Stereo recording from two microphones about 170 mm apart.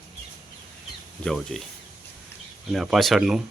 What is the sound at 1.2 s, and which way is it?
Speech, 5° left (ahead or behind).